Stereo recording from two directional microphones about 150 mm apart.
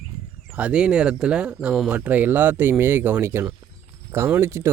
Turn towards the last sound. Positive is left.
turn(degrees=-15)  # may be behind; listen again after turning